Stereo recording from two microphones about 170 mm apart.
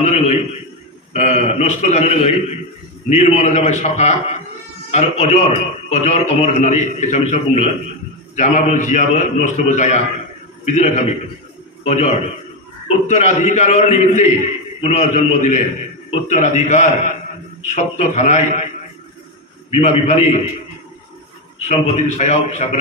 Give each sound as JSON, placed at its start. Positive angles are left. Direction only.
{"t": 0.0, "sound": "a sound", "side_deg": 40}
{"t": 1.1, "sound": "a man's voice", "side_deg": 40}
{"t": 19.7, "sound": "a man's voice", "side_deg": 40}
{"t": 21.6, "sound": "a man's voice", "side_deg": 45}